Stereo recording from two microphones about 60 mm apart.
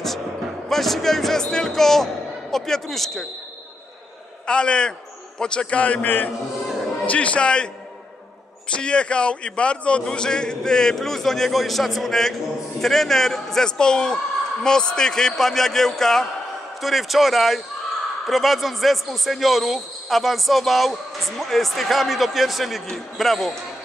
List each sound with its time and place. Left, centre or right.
0.7 s a man's voice: centre
4.5 s a man's voice: centre; by 6.3 s left
7.1 s a man's voice: left; by 23.5 s centre